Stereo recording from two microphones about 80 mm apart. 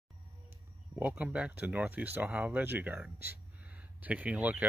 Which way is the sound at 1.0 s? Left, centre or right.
Right.